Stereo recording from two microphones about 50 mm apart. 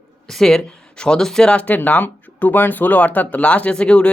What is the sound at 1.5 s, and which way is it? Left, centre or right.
Speech, left.